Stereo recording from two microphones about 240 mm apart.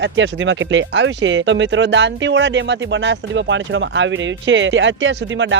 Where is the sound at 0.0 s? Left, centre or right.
Right.